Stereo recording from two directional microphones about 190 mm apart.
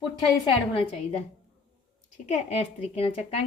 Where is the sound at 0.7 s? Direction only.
30° left (ahead or behind).